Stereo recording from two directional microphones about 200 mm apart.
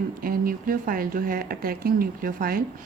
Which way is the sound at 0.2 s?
45° right (ahead or behind).